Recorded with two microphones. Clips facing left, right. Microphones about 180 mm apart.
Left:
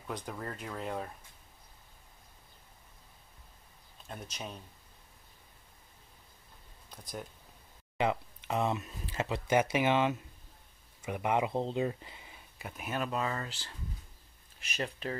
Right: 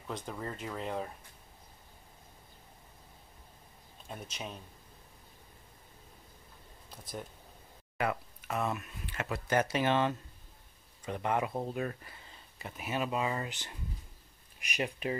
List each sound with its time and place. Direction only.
0.0 s speech: centre (ahead or behind)
4.1 s speech: 5° right (ahead or behind)
6.9 s speech: 5° right (ahead or behind)
8.0 s speech: 20° left (ahead or behind)
9.5 s speech: 15° left (ahead or behind); by 15.1 s 10° right (ahead or behind)